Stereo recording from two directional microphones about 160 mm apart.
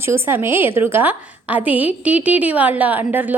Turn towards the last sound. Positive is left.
turn(degrees=-10)  # may be behind; listen again after turning